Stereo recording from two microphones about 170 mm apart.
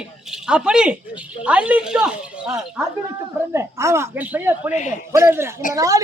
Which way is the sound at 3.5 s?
15° right (ahead or behind).